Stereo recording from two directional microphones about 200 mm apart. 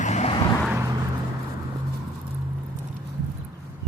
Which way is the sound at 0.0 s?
35° left (ahead or behind).